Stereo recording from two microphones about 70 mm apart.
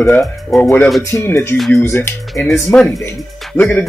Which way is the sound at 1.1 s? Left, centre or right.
Left.